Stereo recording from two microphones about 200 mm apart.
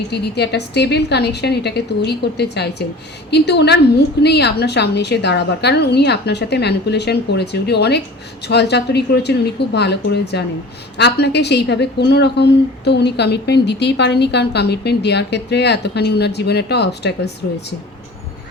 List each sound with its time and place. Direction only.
0.1 s a woman's voice: 55° left (ahead or behind)